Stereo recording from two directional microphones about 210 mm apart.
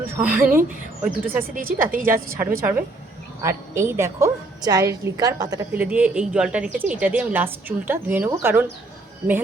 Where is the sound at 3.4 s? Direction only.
15° right (ahead or behind).